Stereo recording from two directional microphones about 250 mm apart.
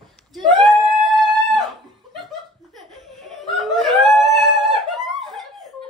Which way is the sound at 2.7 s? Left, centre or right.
Centre.